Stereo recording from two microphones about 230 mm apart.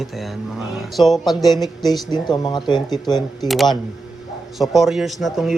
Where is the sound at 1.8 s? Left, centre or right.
Centre.